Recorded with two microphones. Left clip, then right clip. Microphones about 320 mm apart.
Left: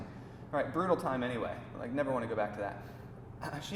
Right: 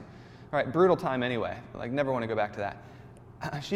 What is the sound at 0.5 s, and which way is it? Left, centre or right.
A man's voice, right.